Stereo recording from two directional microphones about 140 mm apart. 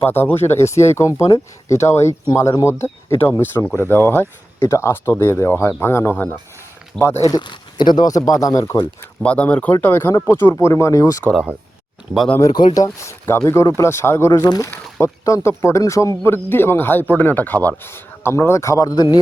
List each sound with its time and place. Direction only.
0.0 s speech: 15° left (ahead or behind)
9.2 s speech: 10° left (ahead or behind)
11.2 s speech: 5° left (ahead or behind)
12.4 s speech: 30° left (ahead or behind)
14.7 s speech: 15° left (ahead or behind)